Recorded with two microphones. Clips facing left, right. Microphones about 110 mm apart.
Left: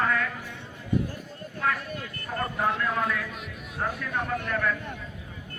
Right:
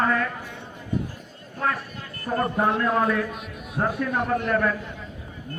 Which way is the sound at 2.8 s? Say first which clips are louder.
Right 6 dB; 40° right (ahead or behind).